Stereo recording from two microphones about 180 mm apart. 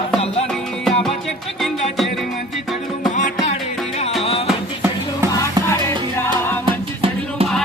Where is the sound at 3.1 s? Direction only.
40° left (ahead or behind).